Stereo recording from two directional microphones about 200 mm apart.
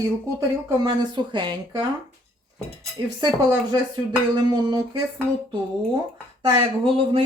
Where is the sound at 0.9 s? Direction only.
20° right (ahead or behind).